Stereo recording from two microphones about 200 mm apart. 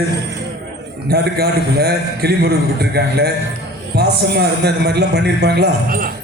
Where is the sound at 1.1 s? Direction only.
50° right (ahead or behind).